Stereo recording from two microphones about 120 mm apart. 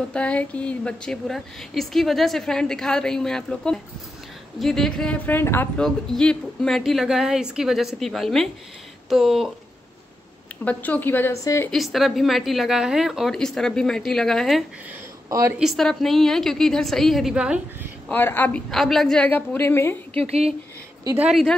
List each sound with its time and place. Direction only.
0.1 s a woman's voice: 10° left (ahead or behind)
5.2 s a woman's voice: 20° left (ahead or behind)
5.8 s a woman's voice: 5° left (ahead or behind)
10.6 s a woman's voice: 15° left (ahead or behind)
11.7 s a woman's voice: centre (ahead or behind)
15.2 s a woman's voice: 25° right (ahead or behind)
15.6 s a woman's voice: centre (ahead or behind)
18.1 s a woman's voice: 15° left (ahead or behind)
18.7 s a woman's voice: centre (ahead or behind); by 20.0 s 20° left (ahead or behind)
20.2 s speech: 60° right (ahead or behind)